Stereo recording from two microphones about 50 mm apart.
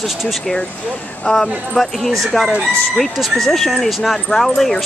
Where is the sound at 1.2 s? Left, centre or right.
Centre.